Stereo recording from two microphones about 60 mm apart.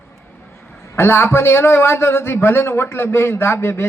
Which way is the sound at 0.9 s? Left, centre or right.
Left.